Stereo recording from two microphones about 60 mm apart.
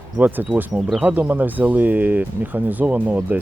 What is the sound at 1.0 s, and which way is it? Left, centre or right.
Speech, right.